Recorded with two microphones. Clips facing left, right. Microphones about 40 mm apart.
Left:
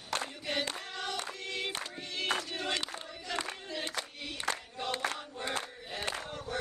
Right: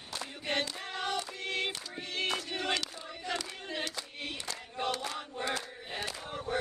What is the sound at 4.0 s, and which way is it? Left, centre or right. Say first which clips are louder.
Choir: left 4 dB; left.